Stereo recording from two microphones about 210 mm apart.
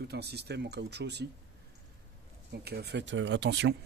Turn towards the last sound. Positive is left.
turn(degrees=-55)  # may be behind; listen again after turning